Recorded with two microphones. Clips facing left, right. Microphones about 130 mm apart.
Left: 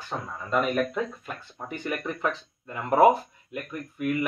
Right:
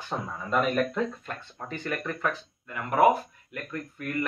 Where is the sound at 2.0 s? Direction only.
25° left (ahead or behind).